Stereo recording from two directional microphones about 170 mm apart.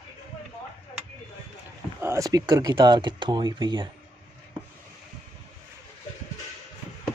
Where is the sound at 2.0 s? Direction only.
20° right (ahead or behind).